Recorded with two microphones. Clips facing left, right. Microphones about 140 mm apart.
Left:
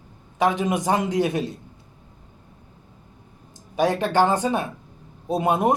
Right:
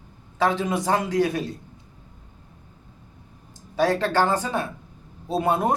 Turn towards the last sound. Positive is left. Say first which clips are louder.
# left 2 dB
turn(degrees=20)  # may be behind; listen again after turning